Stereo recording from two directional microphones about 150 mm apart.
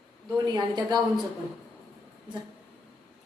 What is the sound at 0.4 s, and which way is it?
Speech, 25° right (ahead or behind).